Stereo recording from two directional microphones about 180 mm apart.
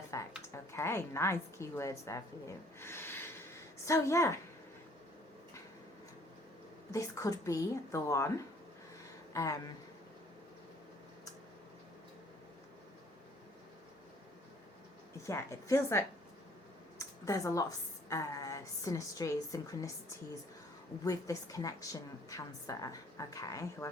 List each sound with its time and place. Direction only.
0.1 s a woman's voice: 20° left (ahead or behind)
2.8 s rub: 10° left (ahead or behind)
3.8 s a woman's voice: 15° left (ahead or behind)
6.9 s a woman's voice: 15° left (ahead or behind)
9.3 s speech: 20° left (ahead or behind)
15.3 s a woman's voice: 15° left (ahead or behind)
17.0 s a sound: 15° left (ahead or behind)
18.1 s a woman's voice: 15° left (ahead or behind)
21.0 s a woman's voice: 20° left (ahead or behind)